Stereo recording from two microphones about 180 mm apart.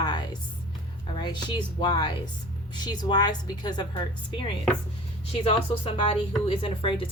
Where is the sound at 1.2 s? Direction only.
25° left (ahead or behind).